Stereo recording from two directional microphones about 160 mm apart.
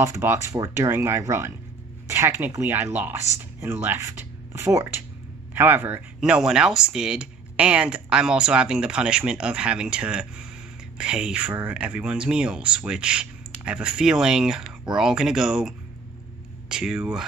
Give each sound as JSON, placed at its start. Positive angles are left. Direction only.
{"t": 0.0, "sound": "speech", "side_deg": -15}